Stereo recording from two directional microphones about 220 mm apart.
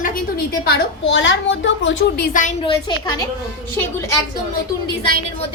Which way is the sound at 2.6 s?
20° left (ahead or behind).